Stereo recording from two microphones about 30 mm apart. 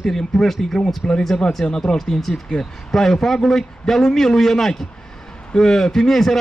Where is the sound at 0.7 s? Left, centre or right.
Left.